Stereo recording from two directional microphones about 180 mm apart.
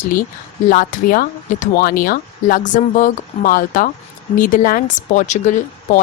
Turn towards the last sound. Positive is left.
turn(degrees=40)  # may be behind; listen again after turning